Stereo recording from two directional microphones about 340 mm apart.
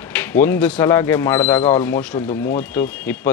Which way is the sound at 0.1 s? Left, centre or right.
Centre.